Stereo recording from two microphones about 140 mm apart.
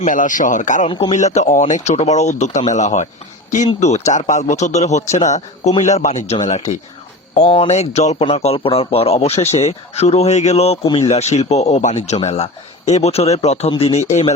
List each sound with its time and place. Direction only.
0.0 s speech: 65° left (ahead or behind)
0.9 s speech: 40° left (ahead or behind)
1.1 s a man's voice: 55° left (ahead or behind)